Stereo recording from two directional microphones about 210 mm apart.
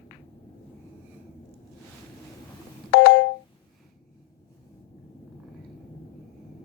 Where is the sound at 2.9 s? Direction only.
55° left (ahead or behind).